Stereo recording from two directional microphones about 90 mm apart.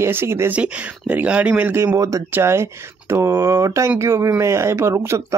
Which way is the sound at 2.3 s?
30° right (ahead or behind).